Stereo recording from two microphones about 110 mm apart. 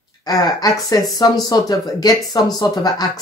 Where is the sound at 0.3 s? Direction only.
35° left (ahead or behind).